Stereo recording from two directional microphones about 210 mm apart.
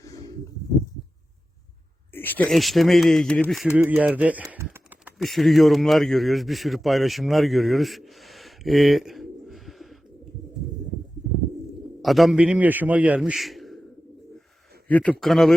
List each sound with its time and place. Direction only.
0.0 s a sound: 15° left (ahead or behind)
2.1 s speech: 10° left (ahead or behind)
12.0 s a man's voice: centre (ahead or behind)
14.8 s a man's voice: 5° left (ahead or behind)